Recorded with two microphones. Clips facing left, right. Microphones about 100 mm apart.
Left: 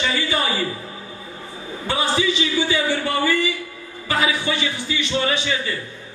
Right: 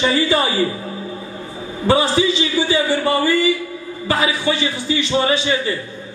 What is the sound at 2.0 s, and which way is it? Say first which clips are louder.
A man's voice: right 3 dB; 30° right (ahead or behind).